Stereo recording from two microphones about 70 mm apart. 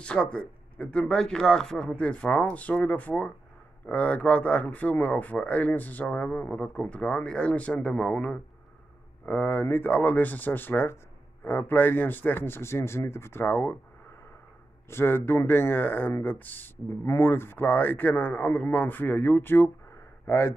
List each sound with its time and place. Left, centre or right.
0.0 s a man's voice: centre; by 13.7 s left
14.9 s a man's voice: left
20.2 s speech: left